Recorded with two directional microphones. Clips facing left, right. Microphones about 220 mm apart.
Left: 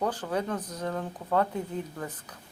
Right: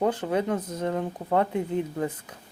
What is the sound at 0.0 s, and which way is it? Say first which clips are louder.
Speech: right 5 dB; 25° right (ahead or behind).